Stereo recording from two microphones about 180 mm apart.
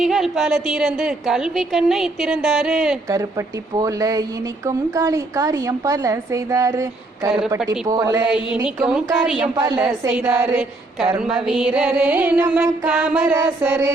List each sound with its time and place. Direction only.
0.0 s a woman's voice: centre (ahead or behind)
3.8 s a woman's voice: 20° right (ahead or behind)
7.9 s a woman's voice: 20° right (ahead or behind)
8.3 s a woman's voice: 5° right (ahead or behind)
9.6 s a woman's voice: 25° right (ahead or behind)
10.1 s a woman's voice: 10° right (ahead or behind)